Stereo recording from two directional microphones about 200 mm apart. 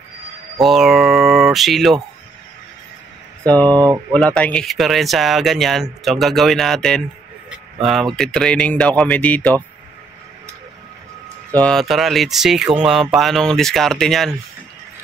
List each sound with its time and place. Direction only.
0.6 s speech: centre (ahead or behind)
3.6 s speech: 20° right (ahead or behind)
4.1 s speech: 5° left (ahead or behind)
11.5 s speech: 5° left (ahead or behind)